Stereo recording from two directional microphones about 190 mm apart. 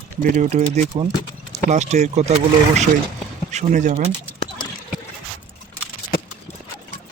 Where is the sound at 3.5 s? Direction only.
35° right (ahead or behind).